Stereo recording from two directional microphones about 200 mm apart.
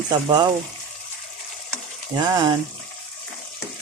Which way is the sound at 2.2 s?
20° right (ahead or behind).